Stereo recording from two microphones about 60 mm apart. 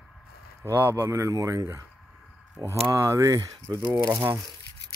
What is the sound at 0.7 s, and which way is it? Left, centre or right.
Speech, right.